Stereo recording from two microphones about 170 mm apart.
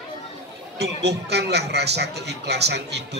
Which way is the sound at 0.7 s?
80° right.